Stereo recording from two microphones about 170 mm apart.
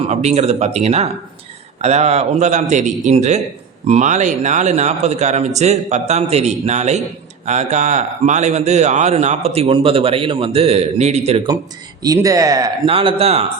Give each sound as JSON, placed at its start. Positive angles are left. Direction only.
{"t": 0.1, "sound": "speech", "side_deg": -40}
{"t": 12.0, "sound": "speech", "side_deg": -20}
{"t": 12.9, "sound": "speech", "side_deg": -35}